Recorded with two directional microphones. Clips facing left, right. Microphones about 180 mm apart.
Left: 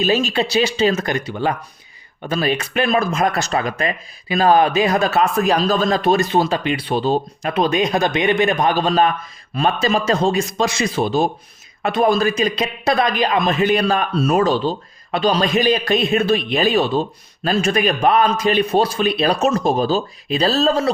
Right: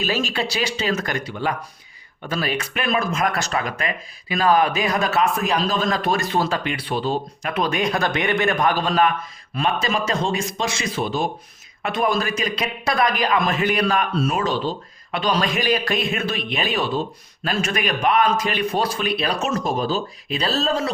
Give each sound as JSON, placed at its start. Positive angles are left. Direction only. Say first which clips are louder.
{"t": 0.0, "sound": "speech", "louder": "left 6 dB", "side_deg": 20}
{"t": 7.1, "sound": "a man's voice", "louder": "left 5 dB", "side_deg": 35}
{"t": 7.6, "sound": "a man's voice", "louder": "left 4 dB", "side_deg": 20}